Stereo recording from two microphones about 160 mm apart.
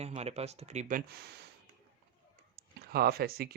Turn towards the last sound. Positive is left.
turn(degrees=-70)  # may be behind; listen again after turning